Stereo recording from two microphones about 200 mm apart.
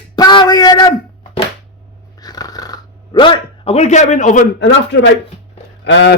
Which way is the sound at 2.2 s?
20° left (ahead or behind).